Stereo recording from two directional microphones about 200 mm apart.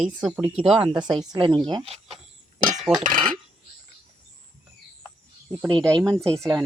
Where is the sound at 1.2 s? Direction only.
20° right (ahead or behind).